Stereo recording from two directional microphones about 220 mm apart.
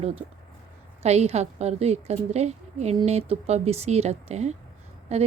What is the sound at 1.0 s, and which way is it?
A woman's voice, 30° right (ahead or behind).